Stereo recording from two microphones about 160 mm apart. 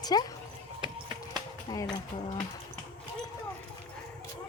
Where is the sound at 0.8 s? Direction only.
30° right (ahead or behind).